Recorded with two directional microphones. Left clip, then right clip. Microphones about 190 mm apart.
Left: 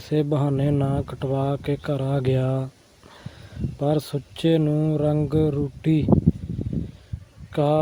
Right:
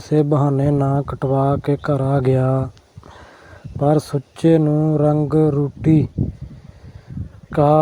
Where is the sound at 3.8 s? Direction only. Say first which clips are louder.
Right 7 dB; 15° right (ahead or behind).